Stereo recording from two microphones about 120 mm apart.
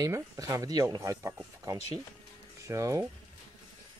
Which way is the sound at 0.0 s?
30° right (ahead or behind).